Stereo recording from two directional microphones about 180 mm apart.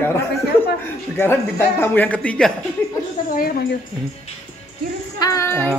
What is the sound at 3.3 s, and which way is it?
Speech, 55° left (ahead or behind).